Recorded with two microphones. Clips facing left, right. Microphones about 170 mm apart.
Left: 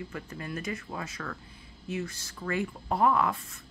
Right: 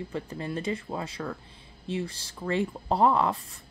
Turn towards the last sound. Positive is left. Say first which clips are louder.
# right 2 dB
turn(degrees=-30)  # may be behind; listen again after turning